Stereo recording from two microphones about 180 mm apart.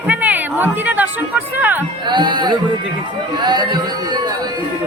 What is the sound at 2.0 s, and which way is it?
Speech, 25° right (ahead or behind).